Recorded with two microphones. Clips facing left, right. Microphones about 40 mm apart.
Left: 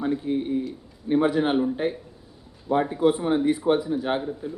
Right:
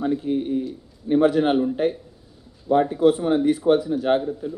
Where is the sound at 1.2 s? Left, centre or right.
Centre.